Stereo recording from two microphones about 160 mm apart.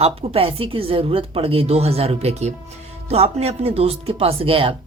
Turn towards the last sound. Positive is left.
turn(degrees=-35)  # may be behind; listen again after turning